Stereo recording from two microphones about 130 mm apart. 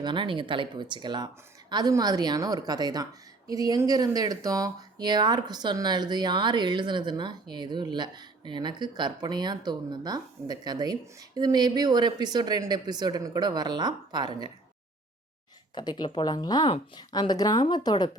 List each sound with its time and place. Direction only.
0.0 s speech: 40° right (ahead or behind)
15.7 s speech: 35° left (ahead or behind)